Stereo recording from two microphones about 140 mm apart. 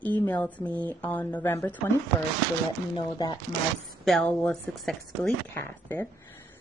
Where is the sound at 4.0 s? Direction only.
Centre (ahead or behind).